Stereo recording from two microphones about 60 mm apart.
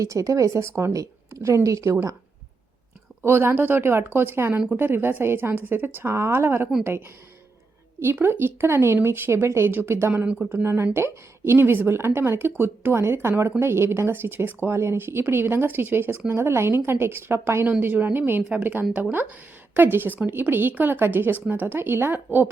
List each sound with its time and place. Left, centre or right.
0.0 s a woman's voice: right
3.2 s speech: right
8.2 s speech: right
11.6 s speech: right
17.7 s speech: right